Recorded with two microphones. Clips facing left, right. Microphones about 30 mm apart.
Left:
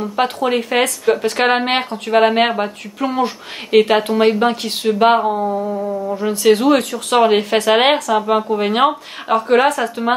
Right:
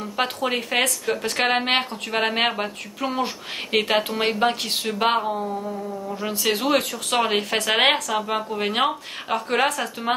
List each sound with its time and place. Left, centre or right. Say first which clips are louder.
0.0 s speech: left 7 dB; centre
0.8 s speech: left 8 dB; centre
5.4 s a sound: left 9 dB; left
6.2 s speech: left 10 dB; centre